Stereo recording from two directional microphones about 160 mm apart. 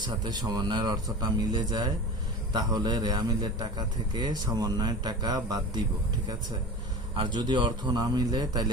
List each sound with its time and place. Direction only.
0.0 s a man's voice: 25° right (ahead or behind)
7.3 s a man's voice: 30° right (ahead or behind)